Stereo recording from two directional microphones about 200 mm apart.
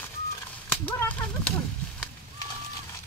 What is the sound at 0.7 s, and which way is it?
Speech, 10° left (ahead or behind).